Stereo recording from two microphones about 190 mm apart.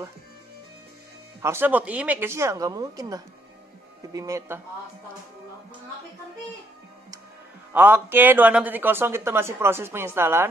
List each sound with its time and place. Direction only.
1.4 s speech: 10° right (ahead or behind)
7.7 s speech: 10° right (ahead or behind)